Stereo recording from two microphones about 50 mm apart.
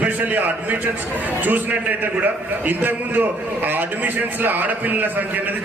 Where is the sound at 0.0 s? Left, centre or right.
Right.